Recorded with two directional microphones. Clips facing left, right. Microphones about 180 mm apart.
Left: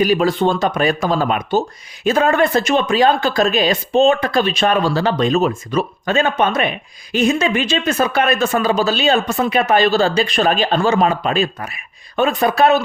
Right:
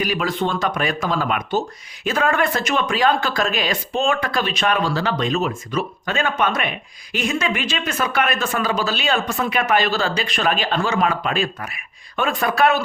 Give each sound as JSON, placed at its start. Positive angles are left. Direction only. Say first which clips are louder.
{"t": 0.0, "sound": "speech", "louder": "left 7 dB", "side_deg": 30}